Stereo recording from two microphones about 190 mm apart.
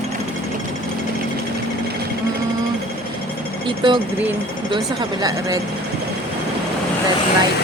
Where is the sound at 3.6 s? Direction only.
25° right (ahead or behind).